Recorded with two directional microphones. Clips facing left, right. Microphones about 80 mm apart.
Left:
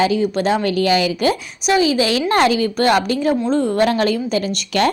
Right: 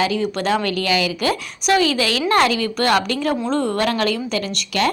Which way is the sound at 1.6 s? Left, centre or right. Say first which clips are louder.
Left 2 dB; centre.